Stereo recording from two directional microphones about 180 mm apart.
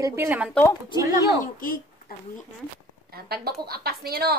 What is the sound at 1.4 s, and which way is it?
Speech, 50° left (ahead or behind).